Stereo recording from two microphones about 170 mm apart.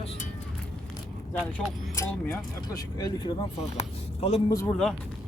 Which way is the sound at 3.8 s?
35° left (ahead or behind).